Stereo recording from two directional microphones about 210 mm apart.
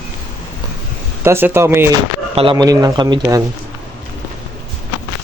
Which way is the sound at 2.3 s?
25° right (ahead or behind).